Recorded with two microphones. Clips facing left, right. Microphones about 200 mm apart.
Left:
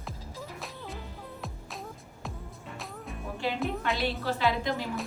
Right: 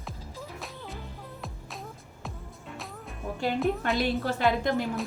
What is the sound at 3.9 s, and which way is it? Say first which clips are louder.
Speech: right 3 dB; 50° right (ahead or behind).